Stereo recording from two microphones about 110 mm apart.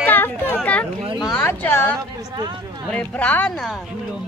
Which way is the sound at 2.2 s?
35° right (ahead or behind).